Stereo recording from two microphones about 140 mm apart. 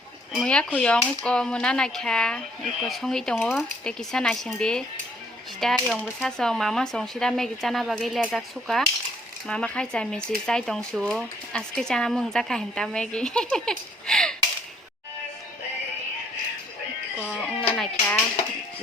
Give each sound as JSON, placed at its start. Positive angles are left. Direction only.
{"t": 0.4, "sound": "speech", "side_deg": 5}
{"t": 17.4, "sound": "music", "side_deg": 5}